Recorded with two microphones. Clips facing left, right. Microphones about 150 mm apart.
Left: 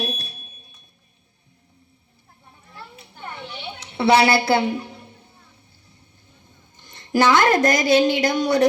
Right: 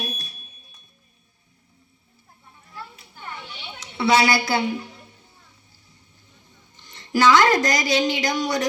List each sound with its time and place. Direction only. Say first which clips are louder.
0.0 s fire alarm: left 5 dB; 70° left (ahead or behind)
3.2 s a sound: left 3 dB; 55° left (ahead or behind)
6.7 s speech: left 3 dB; 55° left (ahead or behind)